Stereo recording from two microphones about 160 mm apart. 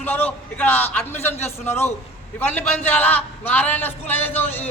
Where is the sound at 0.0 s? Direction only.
10° left (ahead or behind).